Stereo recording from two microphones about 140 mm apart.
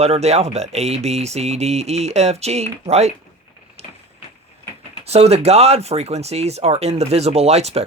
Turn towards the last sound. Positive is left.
turn(degrees=-50)  # may be behind; listen again after turning